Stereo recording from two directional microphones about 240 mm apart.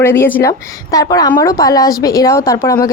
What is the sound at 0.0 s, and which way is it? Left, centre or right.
A woman's voice, centre.